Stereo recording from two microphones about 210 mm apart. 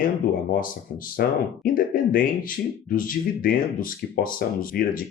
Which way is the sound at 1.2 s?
45° left (ahead or behind).